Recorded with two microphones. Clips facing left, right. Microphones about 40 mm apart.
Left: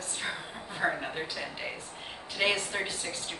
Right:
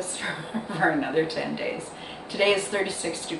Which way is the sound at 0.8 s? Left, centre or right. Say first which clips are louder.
Right 8 dB; right.